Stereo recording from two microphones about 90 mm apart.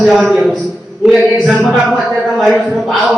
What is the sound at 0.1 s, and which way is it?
Speech, centre (ahead or behind).